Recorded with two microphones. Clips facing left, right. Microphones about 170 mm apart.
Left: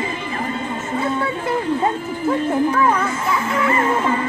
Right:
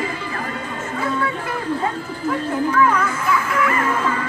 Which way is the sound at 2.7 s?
25° left (ahead or behind).